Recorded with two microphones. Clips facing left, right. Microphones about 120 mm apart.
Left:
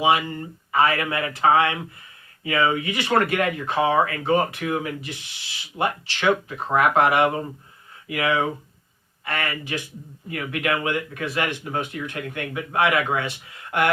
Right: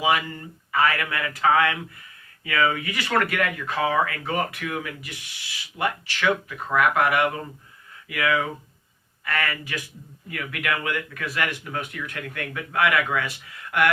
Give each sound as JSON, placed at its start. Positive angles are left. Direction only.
{"t": 0.0, "sound": "speech", "side_deg": 25}